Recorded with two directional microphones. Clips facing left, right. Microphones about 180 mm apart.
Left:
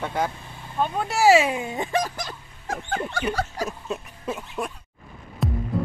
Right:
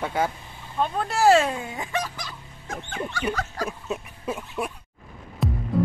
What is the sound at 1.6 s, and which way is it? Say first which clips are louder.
Speech: left 4 dB; 25° left (ahead or behind).